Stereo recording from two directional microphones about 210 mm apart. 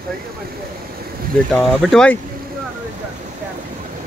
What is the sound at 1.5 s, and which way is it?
Speech, centre (ahead or behind).